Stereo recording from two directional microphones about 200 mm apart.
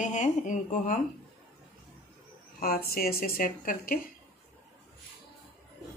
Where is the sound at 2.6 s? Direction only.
45° left (ahead or behind).